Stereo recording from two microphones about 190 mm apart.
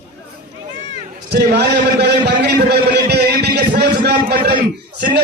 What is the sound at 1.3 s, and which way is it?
A man's voice, 60° right (ahead or behind).